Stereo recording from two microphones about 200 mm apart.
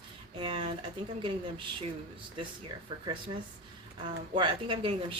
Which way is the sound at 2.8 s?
25° right (ahead or behind).